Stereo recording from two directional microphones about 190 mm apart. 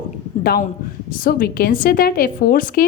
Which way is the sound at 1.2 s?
50° left (ahead or behind).